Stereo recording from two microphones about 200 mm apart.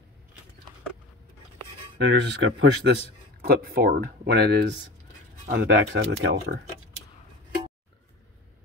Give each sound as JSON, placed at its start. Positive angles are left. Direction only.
{"t": 2.0, "sound": "speech", "side_deg": -60}
{"t": 3.4, "sound": "speech", "side_deg": -55}